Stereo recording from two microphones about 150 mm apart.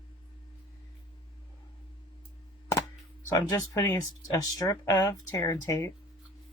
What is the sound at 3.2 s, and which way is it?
Speech, 20° left (ahead or behind).